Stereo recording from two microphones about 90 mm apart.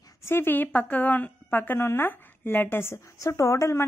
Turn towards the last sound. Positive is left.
turn(degrees=35)  # may be behind; listen again after turning